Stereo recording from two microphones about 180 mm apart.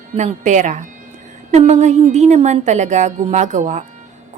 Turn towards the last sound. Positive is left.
turn(degrees=-45)  # may be behind; listen again after turning